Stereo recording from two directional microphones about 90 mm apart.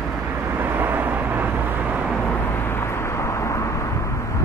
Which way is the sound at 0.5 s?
25° right (ahead or behind).